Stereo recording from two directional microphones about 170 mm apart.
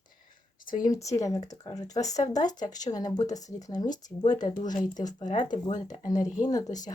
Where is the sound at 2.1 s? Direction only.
45° left (ahead or behind).